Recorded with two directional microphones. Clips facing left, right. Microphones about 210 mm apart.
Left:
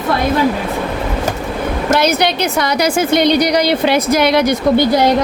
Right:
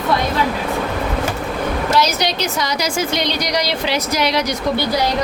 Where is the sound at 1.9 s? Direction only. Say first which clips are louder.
Left 6 dB; 55° left (ahead or behind).